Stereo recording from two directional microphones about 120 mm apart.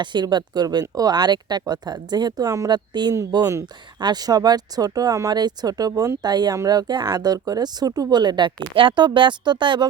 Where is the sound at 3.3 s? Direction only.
25° right (ahead or behind).